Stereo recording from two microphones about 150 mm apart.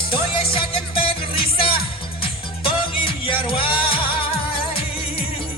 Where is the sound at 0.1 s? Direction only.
35° left (ahead or behind).